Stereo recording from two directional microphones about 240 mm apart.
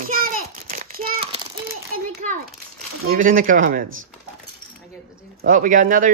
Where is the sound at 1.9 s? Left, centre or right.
Right.